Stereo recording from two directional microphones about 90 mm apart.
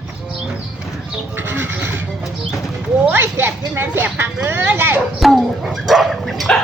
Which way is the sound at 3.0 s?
25° right (ahead or behind).